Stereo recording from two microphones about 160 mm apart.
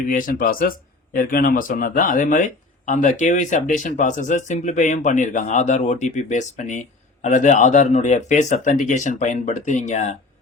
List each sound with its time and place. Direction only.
0.1 s speech: 60° left (ahead or behind)